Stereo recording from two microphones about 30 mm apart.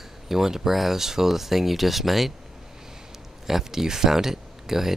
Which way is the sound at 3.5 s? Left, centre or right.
Centre.